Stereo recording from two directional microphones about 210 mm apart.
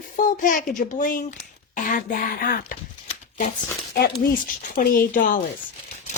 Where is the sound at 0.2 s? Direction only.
40° left (ahead or behind).